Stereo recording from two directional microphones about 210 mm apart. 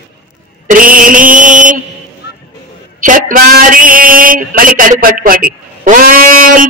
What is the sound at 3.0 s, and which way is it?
A man's voice, 40° right (ahead or behind).